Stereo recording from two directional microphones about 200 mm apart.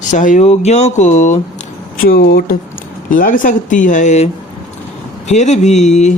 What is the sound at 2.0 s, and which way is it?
Speech, 50° left (ahead or behind).